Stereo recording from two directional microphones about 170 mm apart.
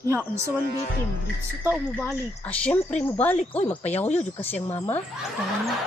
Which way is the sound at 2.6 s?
10° left (ahead or behind).